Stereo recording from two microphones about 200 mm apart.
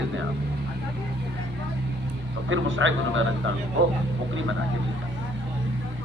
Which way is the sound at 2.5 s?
70° right (ahead or behind).